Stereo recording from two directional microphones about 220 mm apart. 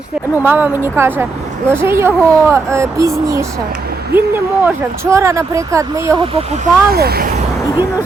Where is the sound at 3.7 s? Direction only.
45° right (ahead or behind).